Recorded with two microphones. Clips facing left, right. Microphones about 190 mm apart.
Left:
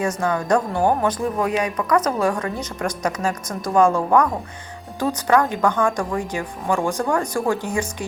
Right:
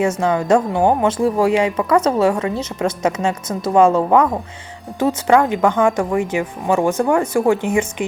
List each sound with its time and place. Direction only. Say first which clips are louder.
0.2 s speech: right 4 dB; 25° right (ahead or behind)